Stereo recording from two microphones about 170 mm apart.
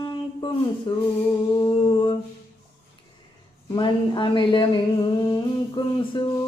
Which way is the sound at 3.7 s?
30° left (ahead or behind).